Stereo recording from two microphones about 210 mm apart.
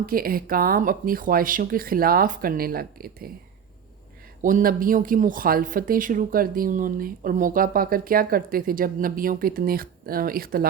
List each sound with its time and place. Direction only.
0.0 s speech: 45° right (ahead or behind)
4.4 s speech: 40° right (ahead or behind)